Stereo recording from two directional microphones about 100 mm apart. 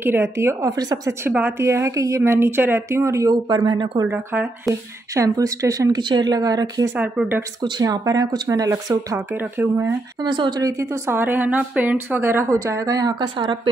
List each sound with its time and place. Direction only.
0.0 s a woman's voice: 25° right (ahead or behind)
0.7 s speech: 40° right (ahead or behind)
1.6 s a woman's voice: 30° right (ahead or behind)
3.4 s speech: 50° right (ahead or behind)
4.1 s a woman's voice: 20° right (ahead or behind)
5.1 s speech: 35° right (ahead or behind)
7.0 s speech: 15° right (ahead or behind)
7.8 s speech: 40° right (ahead or behind)
9.3 s a woman's voice: 20° right (ahead or behind)
10.2 s speech: 50° right (ahead or behind)
10.6 s a woman's voice: 30° right (ahead or behind); by 13.6 s 50° right (ahead or behind)